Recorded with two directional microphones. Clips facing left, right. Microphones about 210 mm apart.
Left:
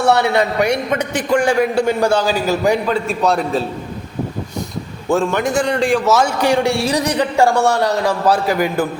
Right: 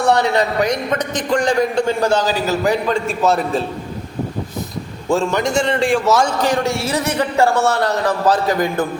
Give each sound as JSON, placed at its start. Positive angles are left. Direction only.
{"t": 0.0, "sound": "a man's voice", "side_deg": 10}
{"t": 5.0, "sound": "a man's voice", "side_deg": 0}